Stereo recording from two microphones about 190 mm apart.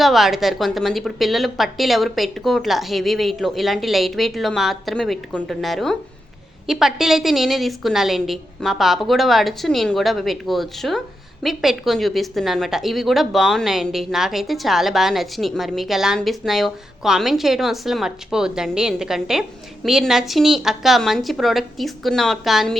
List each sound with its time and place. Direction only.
0.0 s a woman's voice: centre (ahead or behind)